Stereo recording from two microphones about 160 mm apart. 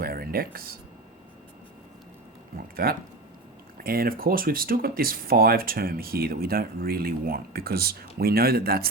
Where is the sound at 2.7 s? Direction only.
65° right (ahead or behind).